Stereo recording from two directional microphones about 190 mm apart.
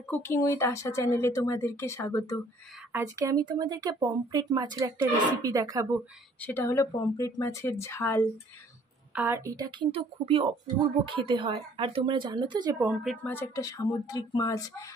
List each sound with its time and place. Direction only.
0.1 s speech: 15° left (ahead or behind)
2.9 s speech: 15° right (ahead or behind)
6.4 s speech: 15° left (ahead or behind)
9.1 s speech: 10° right (ahead or behind)
12.8 s speech: 5° right (ahead or behind)
13.2 s speech: 10° left (ahead or behind)